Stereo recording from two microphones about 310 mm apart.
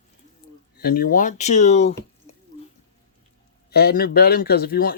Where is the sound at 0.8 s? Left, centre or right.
Left.